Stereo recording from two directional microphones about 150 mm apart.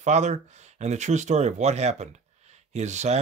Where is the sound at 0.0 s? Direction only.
50° right (ahead or behind).